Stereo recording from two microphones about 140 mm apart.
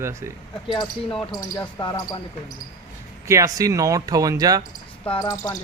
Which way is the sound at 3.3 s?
25° right (ahead or behind).